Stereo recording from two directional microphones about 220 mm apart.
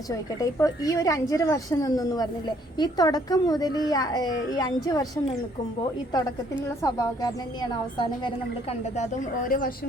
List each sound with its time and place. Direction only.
0.1 s a woman's voice: 15° left (ahead or behind)
6.8 s a woman's voice: 15° left (ahead or behind)
9.0 s a woman's voice: 40° left (ahead or behind)